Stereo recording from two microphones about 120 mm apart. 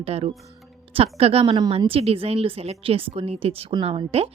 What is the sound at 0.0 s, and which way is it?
A woman's voice, 55° right (ahead or behind).